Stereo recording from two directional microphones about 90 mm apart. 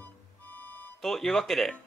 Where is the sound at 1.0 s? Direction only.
5° left (ahead or behind).